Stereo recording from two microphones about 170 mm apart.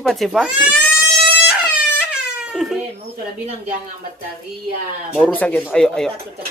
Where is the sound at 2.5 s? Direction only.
Centre (ahead or behind).